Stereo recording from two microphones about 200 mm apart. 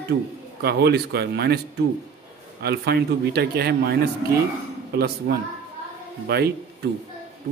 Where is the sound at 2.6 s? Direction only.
55° right (ahead or behind).